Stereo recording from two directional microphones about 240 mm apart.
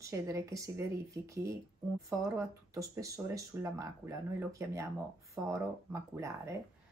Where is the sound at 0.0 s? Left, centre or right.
Centre.